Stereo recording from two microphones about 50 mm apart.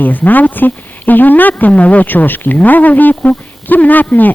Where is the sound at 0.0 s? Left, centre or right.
Left.